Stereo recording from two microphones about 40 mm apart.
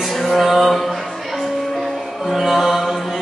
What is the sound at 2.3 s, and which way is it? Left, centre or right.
Music, centre.